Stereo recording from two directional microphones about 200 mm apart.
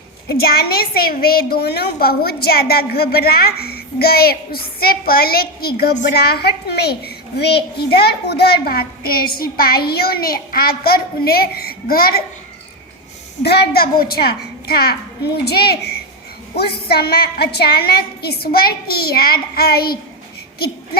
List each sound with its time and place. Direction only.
0.3 s a woman's voice: 50° left (ahead or behind)
13.4 s a woman's voice: 55° left (ahead or behind)